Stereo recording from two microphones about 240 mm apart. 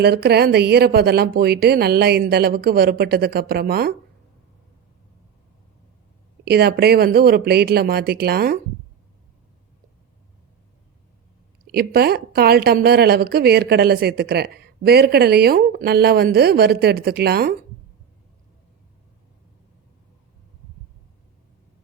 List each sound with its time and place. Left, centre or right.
0.0 s a woman's voice: right
6.4 s a woman's voice: right
11.7 s a woman's voice: right